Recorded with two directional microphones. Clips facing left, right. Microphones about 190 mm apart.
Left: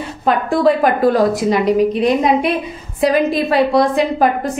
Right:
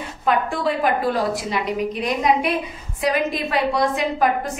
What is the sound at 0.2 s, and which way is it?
A woman's voice, 35° left (ahead or behind).